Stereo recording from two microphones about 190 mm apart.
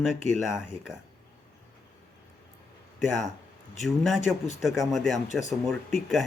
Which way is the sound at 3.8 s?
Centre (ahead or behind).